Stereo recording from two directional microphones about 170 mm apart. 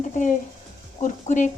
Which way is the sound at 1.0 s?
45° left (ahead or behind).